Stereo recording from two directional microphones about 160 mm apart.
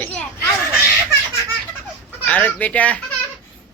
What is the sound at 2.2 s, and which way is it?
Speech, 10° left (ahead or behind).